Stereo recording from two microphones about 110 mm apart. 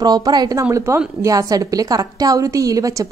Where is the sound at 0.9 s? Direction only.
25° right (ahead or behind).